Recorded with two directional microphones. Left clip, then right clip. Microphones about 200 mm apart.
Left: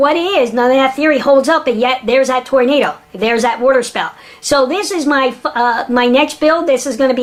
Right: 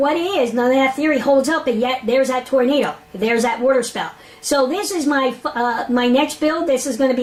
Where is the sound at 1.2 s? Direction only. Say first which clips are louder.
Left 5 dB; 30° right (ahead or behind).